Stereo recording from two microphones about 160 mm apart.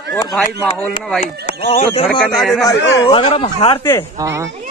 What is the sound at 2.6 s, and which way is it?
Speech, 35° left (ahead or behind).